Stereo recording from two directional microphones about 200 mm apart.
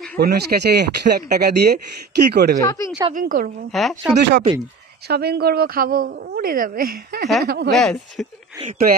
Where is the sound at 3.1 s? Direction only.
45° right (ahead or behind).